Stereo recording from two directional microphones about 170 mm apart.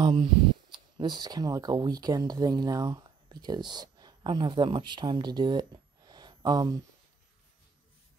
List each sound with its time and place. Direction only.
0.0 s speech: 30° right (ahead or behind)